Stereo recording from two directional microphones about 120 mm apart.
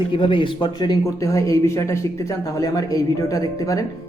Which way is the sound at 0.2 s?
45° left (ahead or behind).